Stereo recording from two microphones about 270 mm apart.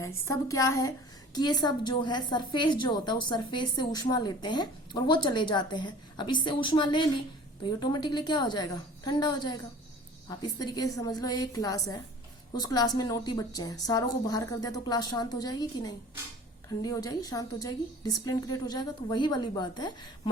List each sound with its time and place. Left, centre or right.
0.3 s a woman's voice: centre